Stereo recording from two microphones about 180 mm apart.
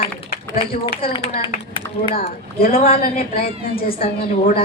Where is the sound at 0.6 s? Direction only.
55° left (ahead or behind).